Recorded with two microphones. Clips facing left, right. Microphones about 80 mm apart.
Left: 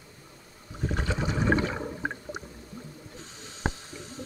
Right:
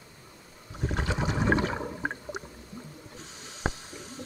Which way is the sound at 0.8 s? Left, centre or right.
Centre.